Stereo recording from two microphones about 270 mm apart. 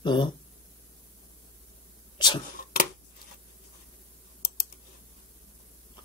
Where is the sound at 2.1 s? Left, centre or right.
Centre.